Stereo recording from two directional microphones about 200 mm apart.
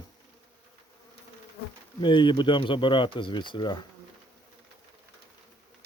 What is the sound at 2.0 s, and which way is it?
Speech, 25° left (ahead or behind).